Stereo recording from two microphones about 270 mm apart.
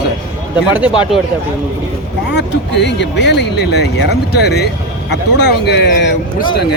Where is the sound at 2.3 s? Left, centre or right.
Left.